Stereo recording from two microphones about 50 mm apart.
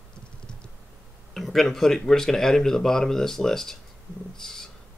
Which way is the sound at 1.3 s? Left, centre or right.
Centre.